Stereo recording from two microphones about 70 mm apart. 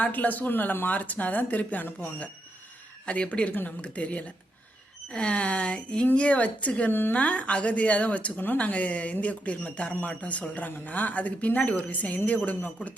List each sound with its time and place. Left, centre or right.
0.0 s speech: left
6.9 s speech: left
7.2 s speech: centre